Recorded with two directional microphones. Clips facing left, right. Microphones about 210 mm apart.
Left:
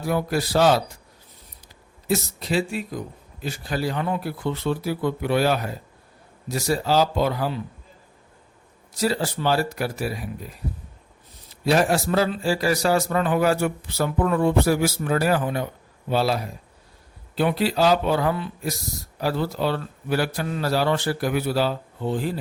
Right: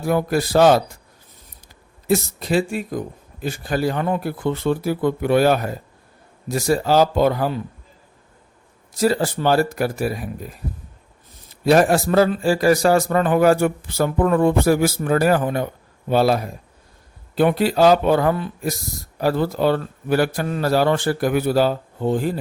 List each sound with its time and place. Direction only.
0.0 s speech: 50° right (ahead or behind)
2.0 s speech: 50° right (ahead or behind)
9.0 s speech: 50° right (ahead or behind)